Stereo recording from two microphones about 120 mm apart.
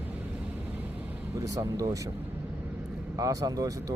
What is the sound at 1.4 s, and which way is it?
Speech, 30° right (ahead or behind).